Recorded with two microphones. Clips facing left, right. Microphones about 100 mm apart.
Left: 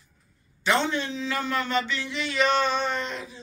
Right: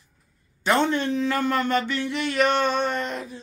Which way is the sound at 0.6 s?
50° right (ahead or behind).